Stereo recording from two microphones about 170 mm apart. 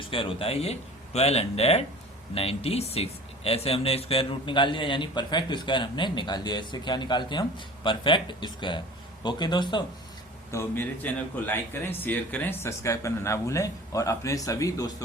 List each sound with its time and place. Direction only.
0.1 s speech: 30° left (ahead or behind)
10.5 s speech: 15° left (ahead or behind)